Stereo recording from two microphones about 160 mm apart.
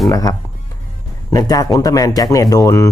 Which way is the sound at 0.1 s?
25° left (ahead or behind).